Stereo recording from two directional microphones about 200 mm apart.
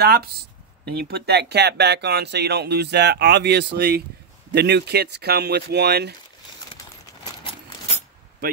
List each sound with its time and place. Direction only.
0.0 s speech: 50° right (ahead or behind)